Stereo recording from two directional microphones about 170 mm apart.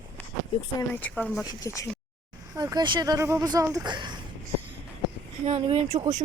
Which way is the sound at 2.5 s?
20° right (ahead or behind).